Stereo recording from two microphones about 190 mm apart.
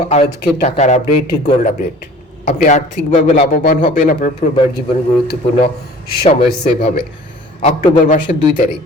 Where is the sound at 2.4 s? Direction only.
40° left (ahead or behind).